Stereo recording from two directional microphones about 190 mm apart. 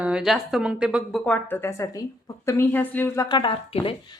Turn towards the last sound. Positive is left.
turn(degrees=30)  # may be behind; listen again after turning